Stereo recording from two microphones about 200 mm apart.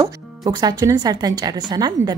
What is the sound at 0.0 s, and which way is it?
Speech, 20° right (ahead or behind).